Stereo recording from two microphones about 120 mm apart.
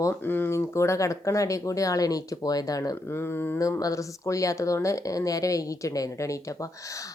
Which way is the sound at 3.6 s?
30° left (ahead or behind).